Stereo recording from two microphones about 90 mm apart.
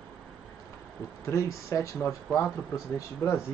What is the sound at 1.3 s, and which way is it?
Speech, 35° left (ahead or behind).